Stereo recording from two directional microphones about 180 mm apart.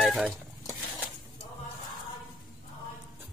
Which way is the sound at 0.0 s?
Centre (ahead or behind).